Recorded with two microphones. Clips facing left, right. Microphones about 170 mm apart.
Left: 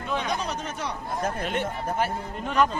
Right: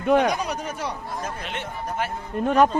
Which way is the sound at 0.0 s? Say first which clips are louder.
Right 10 dB; 60° right (ahead or behind).